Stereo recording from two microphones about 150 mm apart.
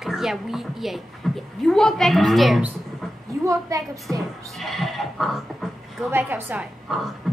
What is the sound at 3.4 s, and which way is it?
Speech, 20° right (ahead or behind).